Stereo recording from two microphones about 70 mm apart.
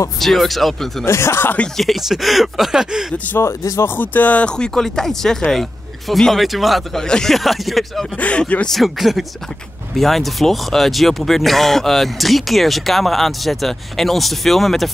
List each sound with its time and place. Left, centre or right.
0.2 s speech: centre
1.0 s speech: left
1.8 s speech: centre
3.4 s speech: left
3.9 s speech: left; by 7.0 s centre
7.0 s speech: centre
8.2 s speech: centre
8.6 s speech: centre